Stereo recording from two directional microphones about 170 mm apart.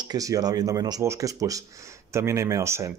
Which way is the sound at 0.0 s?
20° right (ahead or behind).